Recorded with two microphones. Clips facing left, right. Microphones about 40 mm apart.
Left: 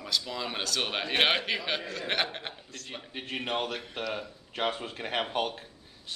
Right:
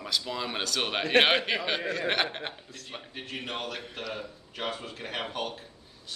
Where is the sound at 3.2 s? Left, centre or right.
Left.